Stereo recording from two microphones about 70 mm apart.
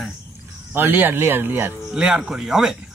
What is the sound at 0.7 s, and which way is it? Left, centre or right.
Speech, right.